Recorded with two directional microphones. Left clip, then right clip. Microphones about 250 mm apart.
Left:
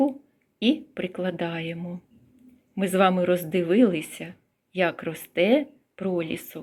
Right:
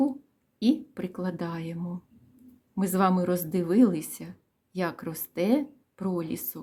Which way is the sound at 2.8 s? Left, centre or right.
Centre.